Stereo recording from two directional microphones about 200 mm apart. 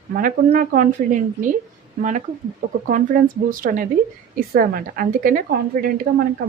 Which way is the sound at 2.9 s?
40° right (ahead or behind).